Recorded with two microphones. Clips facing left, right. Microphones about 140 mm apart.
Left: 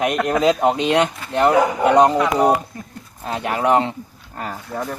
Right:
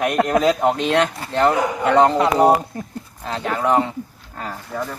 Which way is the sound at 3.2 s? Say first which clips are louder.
Left 1 dB; 15° left (ahead or behind).